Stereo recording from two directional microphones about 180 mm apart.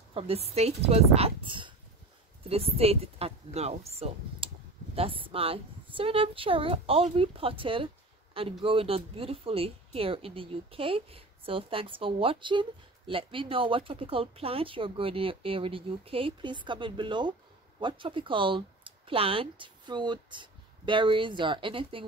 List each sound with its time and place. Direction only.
0.2 s a woman's voice: 30° right (ahead or behind)